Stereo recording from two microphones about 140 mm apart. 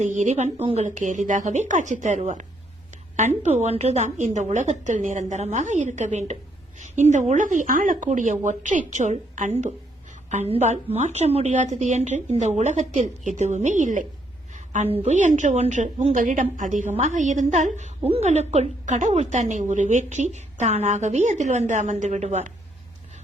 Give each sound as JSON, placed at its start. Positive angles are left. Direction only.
{"t": 0.0, "sound": "a woman's voice", "side_deg": -55}
{"t": 14.5, "sound": "a sound", "side_deg": -60}
{"t": 15.0, "sound": "a woman's voice", "side_deg": -60}